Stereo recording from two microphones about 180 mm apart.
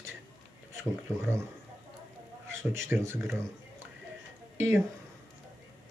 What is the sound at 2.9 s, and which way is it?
Speech, 15° right (ahead or behind).